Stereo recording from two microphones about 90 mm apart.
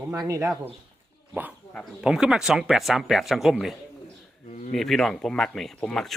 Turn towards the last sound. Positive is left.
turn(degrees=5)  # may be behind; listen again after turning